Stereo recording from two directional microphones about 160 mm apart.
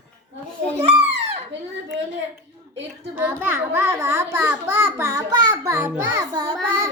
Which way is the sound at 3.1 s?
15° right (ahead or behind).